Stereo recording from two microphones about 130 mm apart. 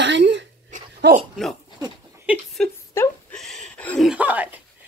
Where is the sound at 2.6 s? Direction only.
5° left (ahead or behind).